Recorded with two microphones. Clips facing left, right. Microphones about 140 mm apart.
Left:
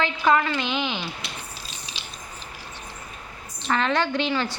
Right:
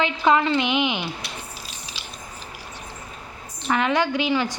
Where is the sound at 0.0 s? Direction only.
20° right (ahead or behind).